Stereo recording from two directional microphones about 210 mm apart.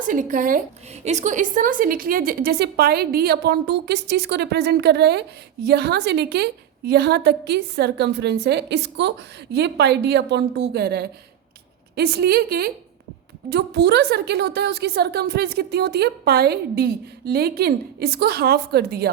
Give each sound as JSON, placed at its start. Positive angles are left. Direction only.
{"t": 0.0, "sound": "a woman's voice", "side_deg": -40}